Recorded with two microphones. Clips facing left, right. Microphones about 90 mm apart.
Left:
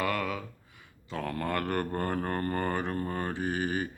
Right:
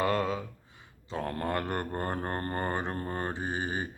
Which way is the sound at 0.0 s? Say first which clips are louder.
Right 2 dB; 30° right (ahead or behind).